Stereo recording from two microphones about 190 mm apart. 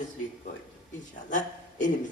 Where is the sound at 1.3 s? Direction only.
40° left (ahead or behind).